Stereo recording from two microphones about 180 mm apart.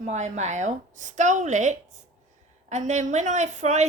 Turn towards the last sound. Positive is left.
turn(degrees=-40)  # may be behind; listen again after turning